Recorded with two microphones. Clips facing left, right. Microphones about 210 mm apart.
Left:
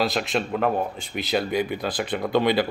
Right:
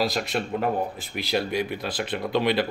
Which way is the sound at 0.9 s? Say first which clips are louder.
Left 1 dB; centre (ahead or behind).